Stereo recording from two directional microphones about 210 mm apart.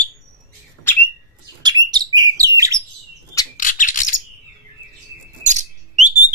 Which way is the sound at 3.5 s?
40° left (ahead or behind).